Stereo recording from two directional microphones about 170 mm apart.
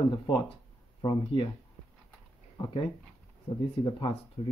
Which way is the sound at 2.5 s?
25° left (ahead or behind).